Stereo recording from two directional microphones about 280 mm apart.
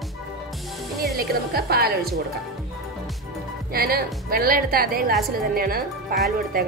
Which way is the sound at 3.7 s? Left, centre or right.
Right.